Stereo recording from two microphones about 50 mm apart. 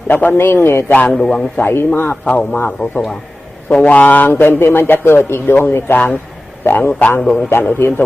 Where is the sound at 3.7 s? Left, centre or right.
Left.